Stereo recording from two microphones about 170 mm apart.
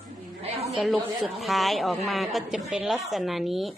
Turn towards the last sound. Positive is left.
turn(degrees=0)  # may be behind; listen again after turning